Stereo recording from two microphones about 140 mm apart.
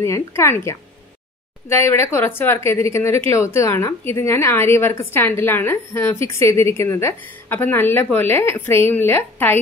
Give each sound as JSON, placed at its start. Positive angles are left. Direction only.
{"t": 0.0, "sound": "a woman's voice", "side_deg": 20}